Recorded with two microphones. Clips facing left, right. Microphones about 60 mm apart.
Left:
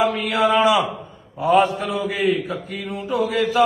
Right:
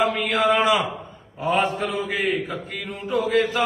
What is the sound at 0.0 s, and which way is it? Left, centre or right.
A man's voice, right.